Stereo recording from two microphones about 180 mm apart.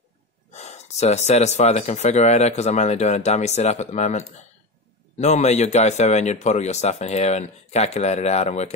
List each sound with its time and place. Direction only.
0.5 s speech: 40° left (ahead or behind)